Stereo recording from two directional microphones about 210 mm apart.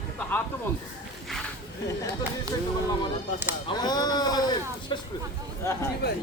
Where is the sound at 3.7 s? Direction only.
20° left (ahead or behind).